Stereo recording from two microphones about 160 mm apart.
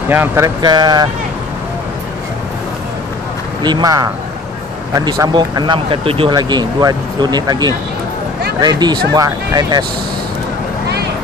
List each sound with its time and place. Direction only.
0.1 s speech: 15° right (ahead or behind)
0.6 s speech: 25° right (ahead or behind)
3.6 s speech: 25° right (ahead or behind)